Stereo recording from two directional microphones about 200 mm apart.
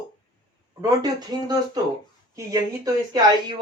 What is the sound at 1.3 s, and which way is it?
Speech, 20° right (ahead or behind).